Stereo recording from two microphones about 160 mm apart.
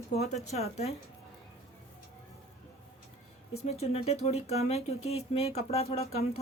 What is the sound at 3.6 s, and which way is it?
Speech, 40° left (ahead or behind).